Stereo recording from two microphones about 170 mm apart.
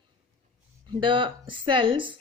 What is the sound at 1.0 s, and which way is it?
A woman's voice, 30° right (ahead or behind).